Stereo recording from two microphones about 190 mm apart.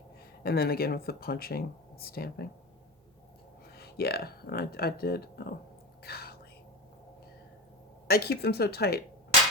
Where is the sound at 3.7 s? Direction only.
55° left (ahead or behind).